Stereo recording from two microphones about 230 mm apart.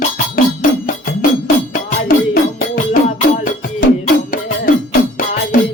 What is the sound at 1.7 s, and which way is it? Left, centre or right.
Music, left.